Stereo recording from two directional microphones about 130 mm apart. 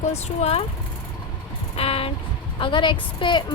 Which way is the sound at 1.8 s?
45° left (ahead or behind).